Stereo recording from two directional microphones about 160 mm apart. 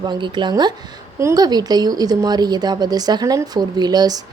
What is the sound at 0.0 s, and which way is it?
Speech, 30° right (ahead or behind).